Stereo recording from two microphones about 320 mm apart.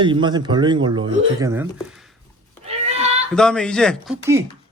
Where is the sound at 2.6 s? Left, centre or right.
Centre.